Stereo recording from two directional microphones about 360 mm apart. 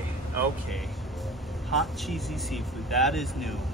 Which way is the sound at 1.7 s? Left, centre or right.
Centre.